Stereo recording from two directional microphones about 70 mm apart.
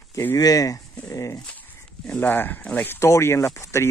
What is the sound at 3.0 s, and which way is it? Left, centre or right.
Speech, left.